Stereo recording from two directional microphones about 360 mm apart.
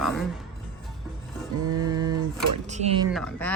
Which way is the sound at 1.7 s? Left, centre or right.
Centre.